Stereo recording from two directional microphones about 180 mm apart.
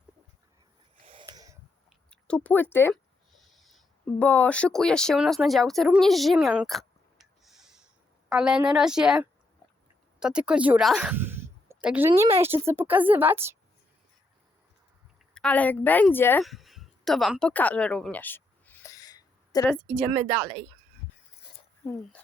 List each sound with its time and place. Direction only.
1.0 s wheeze: 25° right (ahead or behind)
2.0 s speech: 5° left (ahead or behind)
3.4 s a woman's voice: centre (ahead or behind)
10.2 s a sound: 5° right (ahead or behind)
11.9 s a woman's voice: 10° right (ahead or behind)
15.4 s a woman's voice: 5° left (ahead or behind)
16.4 s a sound: centre (ahead or behind); by 19.6 s 20° left (ahead or behind)
20.1 s a woman's voice: 20° right (ahead or behind)
21.8 s a woman's voice: 10° left (ahead or behind)